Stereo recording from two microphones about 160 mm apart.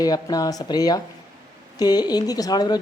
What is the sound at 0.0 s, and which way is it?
A woman's voice, 25° left (ahead or behind).